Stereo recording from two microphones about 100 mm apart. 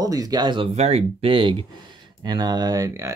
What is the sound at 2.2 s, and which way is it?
Speech, 45° right (ahead or behind).